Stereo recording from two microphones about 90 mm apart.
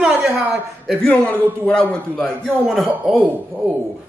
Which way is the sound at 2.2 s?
Centre (ahead or behind).